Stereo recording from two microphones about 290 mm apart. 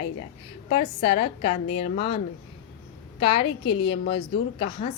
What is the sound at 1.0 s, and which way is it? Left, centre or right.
A woman's voice, centre.